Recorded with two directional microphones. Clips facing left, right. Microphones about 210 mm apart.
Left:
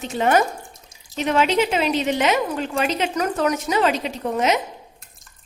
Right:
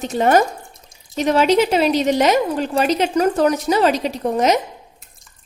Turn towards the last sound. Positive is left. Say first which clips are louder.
# even
turn(degrees=0)  # may be behind; listen again after turning